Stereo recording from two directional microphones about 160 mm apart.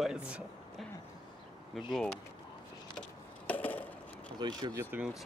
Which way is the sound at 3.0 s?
10° left (ahead or behind).